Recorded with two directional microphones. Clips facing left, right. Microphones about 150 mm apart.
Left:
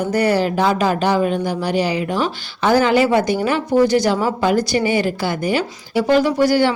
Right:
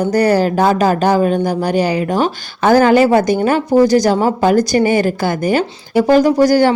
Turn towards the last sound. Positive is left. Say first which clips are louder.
# right 5 dB
turn(degrees=-40)  # may be behind; listen again after turning